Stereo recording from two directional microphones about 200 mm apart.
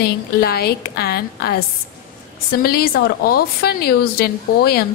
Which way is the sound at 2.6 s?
50° left (ahead or behind).